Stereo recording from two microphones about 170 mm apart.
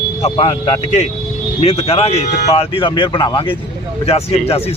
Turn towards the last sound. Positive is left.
turn(degrees=35)  # may be behind; listen again after turning